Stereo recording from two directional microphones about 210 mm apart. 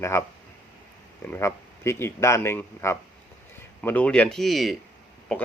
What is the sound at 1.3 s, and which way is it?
Speech, 10° left (ahead or behind).